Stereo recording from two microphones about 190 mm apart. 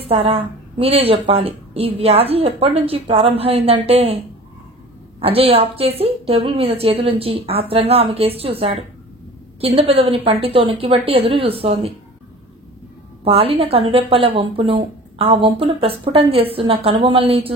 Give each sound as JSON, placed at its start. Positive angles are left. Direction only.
{"t": 0.1, "sound": "a woman's voice", "side_deg": -30}
{"t": 5.2, "sound": "a woman's voice", "side_deg": -30}
{"t": 13.2, "sound": "speech", "side_deg": -30}